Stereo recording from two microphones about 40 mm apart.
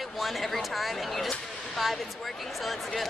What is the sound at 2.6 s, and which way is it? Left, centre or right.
Speech, centre.